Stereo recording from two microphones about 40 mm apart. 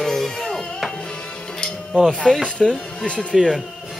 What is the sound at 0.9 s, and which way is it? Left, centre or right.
Music, left.